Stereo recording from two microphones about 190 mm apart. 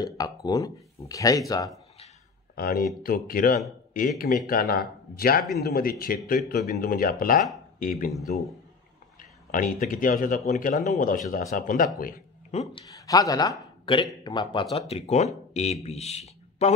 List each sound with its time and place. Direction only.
0.0 s speech: 20° left (ahead or behind)
2.5 s speech: 50° left (ahead or behind)
8.1 s a man's voice: centre (ahead or behind)
9.5 s speech: 45° left (ahead or behind)
12.0 s a sound: 50° left (ahead or behind)
12.8 s a man's voice: 20° left (ahead or behind); by 16.7 s 35° left (ahead or behind)